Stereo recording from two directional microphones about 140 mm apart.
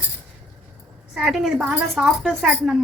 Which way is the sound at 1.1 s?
5° right (ahead or behind).